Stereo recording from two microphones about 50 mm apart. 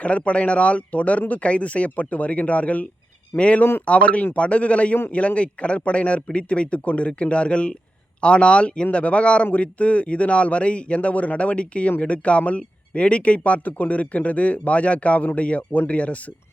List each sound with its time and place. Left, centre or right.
0.0 s speech: left